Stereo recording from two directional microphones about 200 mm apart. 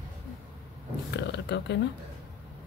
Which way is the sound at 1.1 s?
60° left (ahead or behind).